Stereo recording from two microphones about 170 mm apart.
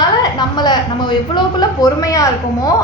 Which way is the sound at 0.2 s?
25° left (ahead or behind).